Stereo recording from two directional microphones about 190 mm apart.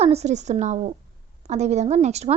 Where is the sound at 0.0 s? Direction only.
35° right (ahead or behind).